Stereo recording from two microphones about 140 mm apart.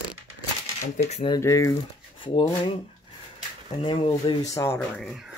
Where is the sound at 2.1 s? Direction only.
40° left (ahead or behind).